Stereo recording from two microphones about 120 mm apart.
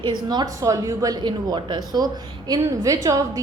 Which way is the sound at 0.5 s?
25° right (ahead or behind).